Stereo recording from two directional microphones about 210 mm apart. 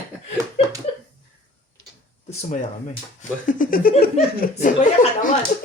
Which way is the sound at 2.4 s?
35° left (ahead or behind).